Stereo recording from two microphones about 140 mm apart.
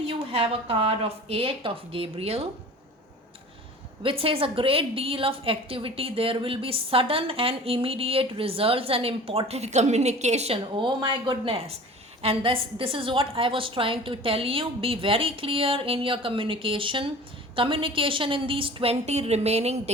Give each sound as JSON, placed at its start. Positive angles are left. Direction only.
{"t": 0.1, "sound": "speech", "side_deg": -40}
{"t": 4.0, "sound": "a woman's voice", "side_deg": -40}